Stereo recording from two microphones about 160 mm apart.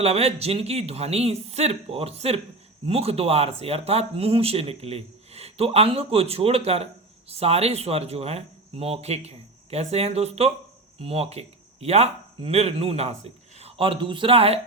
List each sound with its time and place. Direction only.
0.0 s speech: 40° right (ahead or behind)